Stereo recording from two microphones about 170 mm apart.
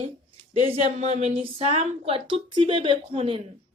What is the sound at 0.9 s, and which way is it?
Speech, 40° right (ahead or behind).